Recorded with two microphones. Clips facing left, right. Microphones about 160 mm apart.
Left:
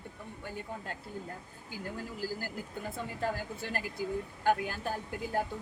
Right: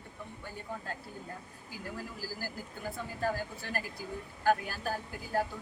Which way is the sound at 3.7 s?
20° left (ahead or behind).